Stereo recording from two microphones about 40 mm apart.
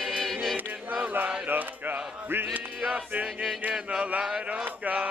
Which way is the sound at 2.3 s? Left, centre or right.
Right.